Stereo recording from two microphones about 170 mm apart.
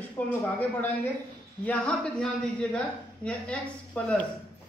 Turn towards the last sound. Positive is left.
turn(degrees=5)  # may be behind; listen again after turning